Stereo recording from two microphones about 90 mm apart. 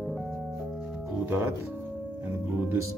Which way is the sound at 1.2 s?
30° right (ahead or behind).